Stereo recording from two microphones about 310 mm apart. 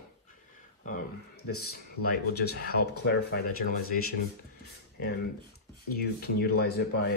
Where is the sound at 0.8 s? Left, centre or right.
Left.